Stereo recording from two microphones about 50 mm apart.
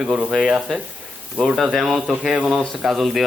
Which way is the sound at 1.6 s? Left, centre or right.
Centre.